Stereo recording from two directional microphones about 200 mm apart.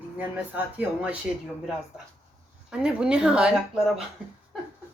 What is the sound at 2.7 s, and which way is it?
Speech, 5° right (ahead or behind).